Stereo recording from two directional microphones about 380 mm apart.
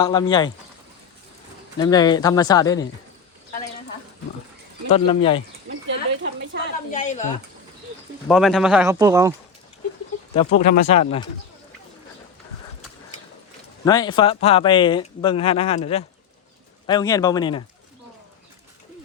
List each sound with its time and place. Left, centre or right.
0.0 s speech: centre
1.8 s speech: centre
4.9 s speech: centre
5.6 s a sound: right
6.9 s speech: centre
8.3 s speech: centre
10.3 s speech: centre
13.8 s speech: centre